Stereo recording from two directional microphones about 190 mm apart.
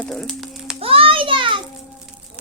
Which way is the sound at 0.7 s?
30° right (ahead or behind).